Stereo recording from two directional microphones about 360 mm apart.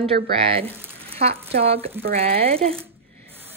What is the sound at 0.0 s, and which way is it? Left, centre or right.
A woman's voice, centre.